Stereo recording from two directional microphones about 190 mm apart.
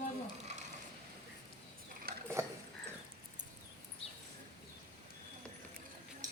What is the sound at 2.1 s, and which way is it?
Mechanisms, 55° right (ahead or behind).